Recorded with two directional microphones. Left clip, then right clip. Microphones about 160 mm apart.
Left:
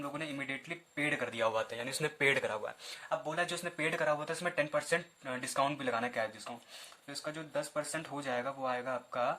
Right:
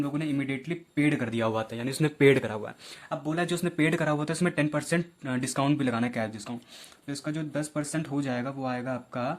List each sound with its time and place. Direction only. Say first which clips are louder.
0.0 s speech: right 8 dB; 25° right (ahead or behind)
1.7 s speech: right 6 dB; 15° right (ahead or behind)
3.2 s speech: right 6 dB; 30° right (ahead or behind)